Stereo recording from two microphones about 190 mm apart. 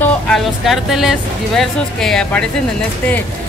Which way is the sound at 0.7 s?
Centre (ahead or behind).